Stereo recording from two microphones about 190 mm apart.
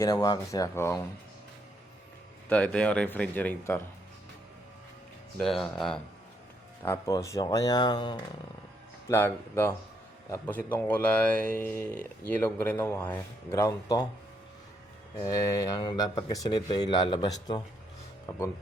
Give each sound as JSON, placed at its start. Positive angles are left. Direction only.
{"t": 0.0, "sound": "speech", "side_deg": 20}
{"t": 2.5, "sound": "speech", "side_deg": 5}
{"t": 5.4, "sound": "speech", "side_deg": 0}
{"t": 6.8, "sound": "speech", "side_deg": 15}
{"t": 9.0, "sound": "speech", "side_deg": 10}
{"t": 15.2, "sound": "speech", "side_deg": 20}